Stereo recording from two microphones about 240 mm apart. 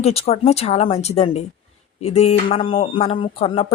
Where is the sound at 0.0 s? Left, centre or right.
Left.